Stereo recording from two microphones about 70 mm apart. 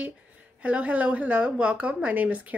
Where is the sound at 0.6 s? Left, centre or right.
Centre.